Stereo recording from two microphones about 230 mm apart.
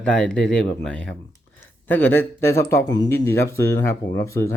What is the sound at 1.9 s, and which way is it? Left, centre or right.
Speech, centre.